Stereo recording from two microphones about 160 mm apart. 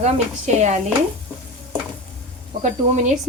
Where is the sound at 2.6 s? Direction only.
50° right (ahead or behind).